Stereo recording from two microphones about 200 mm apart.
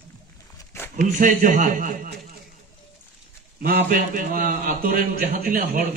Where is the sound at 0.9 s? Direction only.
40° right (ahead or behind).